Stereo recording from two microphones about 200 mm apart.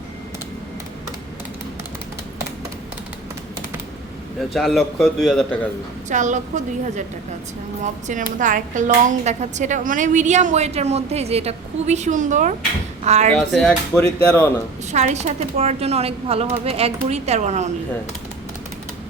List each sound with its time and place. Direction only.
4.4 s a man's voice: centre (ahead or behind)
6.1 s speech: 40° right (ahead or behind)
8.0 s speech: 40° right (ahead or behind)
13.3 s a man's voice: 5° left (ahead or behind)
14.9 s speech: 35° right (ahead or behind)